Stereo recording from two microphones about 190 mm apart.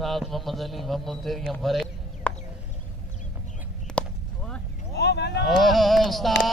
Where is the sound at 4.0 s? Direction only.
5° left (ahead or behind).